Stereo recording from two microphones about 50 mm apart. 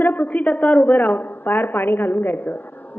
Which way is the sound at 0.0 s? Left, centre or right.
Left.